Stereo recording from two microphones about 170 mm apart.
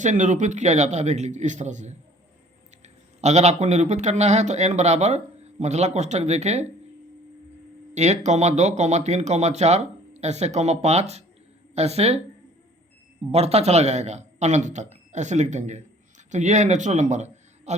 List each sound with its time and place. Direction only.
0.0 s a man's voice: 45° right (ahead or behind)
7.9 s a man's voice: 40° right (ahead or behind)
13.3 s a man's voice: 35° right (ahead or behind)